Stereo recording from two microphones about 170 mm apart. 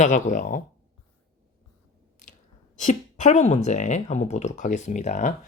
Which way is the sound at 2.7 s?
45° left (ahead or behind).